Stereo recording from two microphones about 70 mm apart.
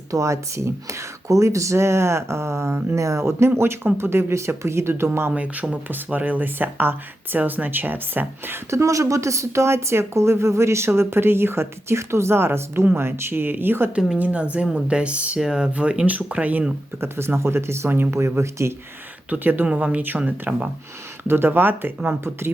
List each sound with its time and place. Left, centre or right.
0.1 s a woman's voice: right
5.3 s a woman's voice: centre; by 13.9 s right
14.2 s speech: centre
17.0 s a woman's voice: right
19.3 s speech: right
21.2 s a woman's voice: right